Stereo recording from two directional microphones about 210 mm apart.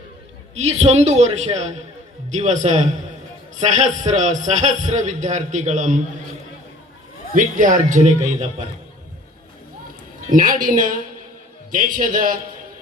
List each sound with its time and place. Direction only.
0.5 s a man's voice: 30° right (ahead or behind)
4.1 s a man's voice: 35° right (ahead or behind)
7.3 s a man's voice: 40° right (ahead or behind)
10.3 s a man's voice: 40° right (ahead or behind)